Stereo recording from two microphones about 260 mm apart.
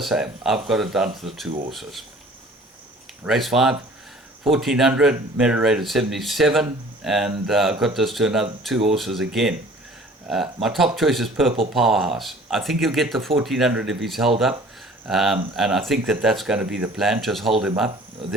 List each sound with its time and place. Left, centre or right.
0.0 s speech: centre
3.2 s speech: centre